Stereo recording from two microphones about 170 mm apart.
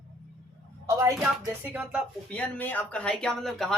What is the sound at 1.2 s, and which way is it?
Speech, 5° right (ahead or behind).